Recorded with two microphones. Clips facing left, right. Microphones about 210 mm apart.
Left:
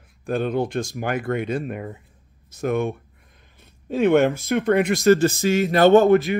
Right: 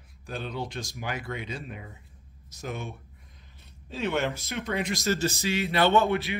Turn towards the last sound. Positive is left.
turn(degrees=45)  # may be behind; listen again after turning